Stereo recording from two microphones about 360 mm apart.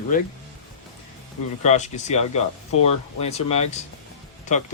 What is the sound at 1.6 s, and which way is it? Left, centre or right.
Speech, centre.